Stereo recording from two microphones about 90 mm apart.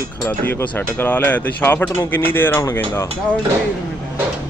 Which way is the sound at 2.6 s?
30° left (ahead or behind).